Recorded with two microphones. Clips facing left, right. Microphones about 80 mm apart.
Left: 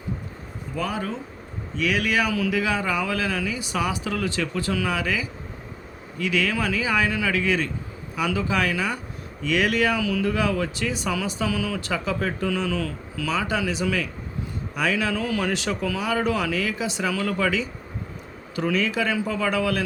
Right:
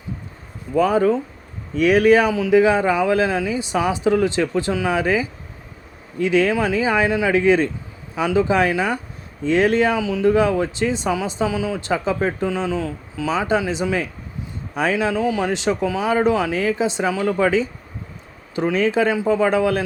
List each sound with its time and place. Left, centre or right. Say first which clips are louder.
0.8 s speech: right 12 dB; right
2.3 s speech: right 9 dB; right